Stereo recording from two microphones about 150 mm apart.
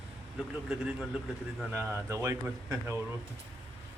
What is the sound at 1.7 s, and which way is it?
Speech, 15° right (ahead or behind).